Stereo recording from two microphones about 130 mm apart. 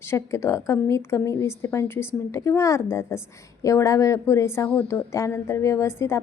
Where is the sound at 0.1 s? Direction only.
20° left (ahead or behind).